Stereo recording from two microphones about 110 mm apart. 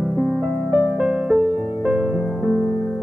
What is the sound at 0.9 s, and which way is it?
Music, 10° right (ahead or behind).